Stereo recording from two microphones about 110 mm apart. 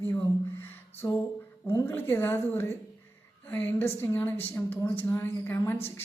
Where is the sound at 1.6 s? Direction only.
25° left (ahead or behind).